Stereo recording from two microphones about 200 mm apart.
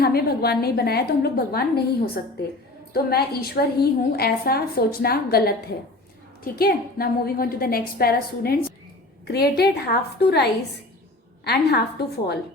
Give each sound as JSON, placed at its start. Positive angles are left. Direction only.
{"t": 0.0, "sound": "a woman's voice", "side_deg": 50}